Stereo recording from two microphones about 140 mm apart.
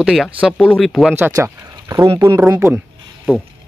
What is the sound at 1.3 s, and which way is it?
Speech, 20° right (ahead or behind).